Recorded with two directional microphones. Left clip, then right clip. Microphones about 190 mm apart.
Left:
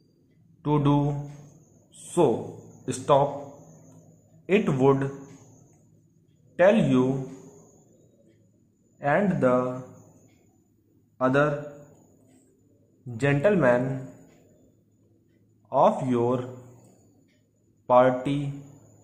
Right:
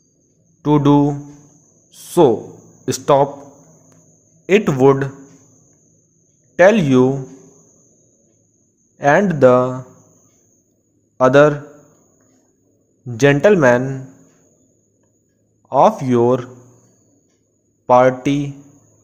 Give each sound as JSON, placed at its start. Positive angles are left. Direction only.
{"t": 0.6, "sound": "speech", "side_deg": -35}
{"t": 2.8, "sound": "speech", "side_deg": -35}
{"t": 4.5, "sound": "speech", "side_deg": -25}
{"t": 6.5, "sound": "speech", "side_deg": -30}
{"t": 8.9, "sound": "speech", "side_deg": -40}
{"t": 11.1, "sound": "speech", "side_deg": -40}
{"t": 13.0, "sound": "speech", "side_deg": -35}
{"t": 15.7, "sound": "speech", "side_deg": -30}
{"t": 17.8, "sound": "speech", "side_deg": -30}